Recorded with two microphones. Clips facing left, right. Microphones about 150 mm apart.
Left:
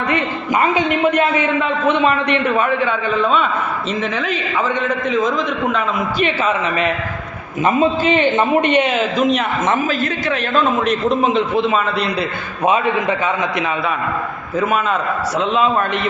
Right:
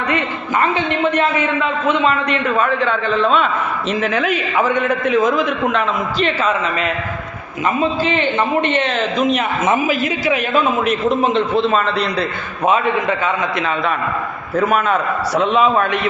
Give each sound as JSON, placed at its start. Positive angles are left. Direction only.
{"t": 0.6, "sound": "a man's voice", "side_deg": 10}
{"t": 4.0, "sound": "a man's voice", "side_deg": -5}
{"t": 6.1, "sound": "a man's voice", "side_deg": 10}
{"t": 7.6, "sound": "a man's voice", "side_deg": 20}
{"t": 12.6, "sound": "a man's voice", "side_deg": 15}
{"t": 14.5, "sound": "a man's voice", "side_deg": 0}